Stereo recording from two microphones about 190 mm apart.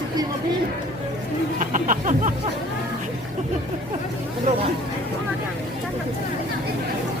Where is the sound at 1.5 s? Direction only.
45° right (ahead or behind).